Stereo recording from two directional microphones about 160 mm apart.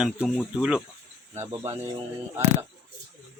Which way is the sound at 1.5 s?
20° right (ahead or behind).